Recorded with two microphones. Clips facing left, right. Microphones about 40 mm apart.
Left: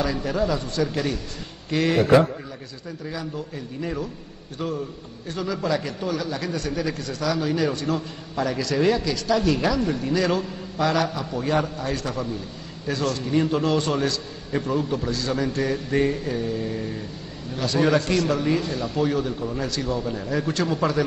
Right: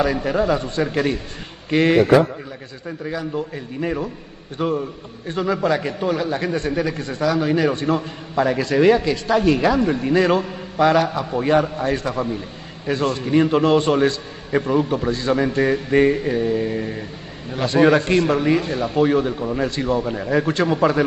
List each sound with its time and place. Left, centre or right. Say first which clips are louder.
0.0 s a man's voice: right 5 dB; right
3.1 s a man's voice: right 6 dB; right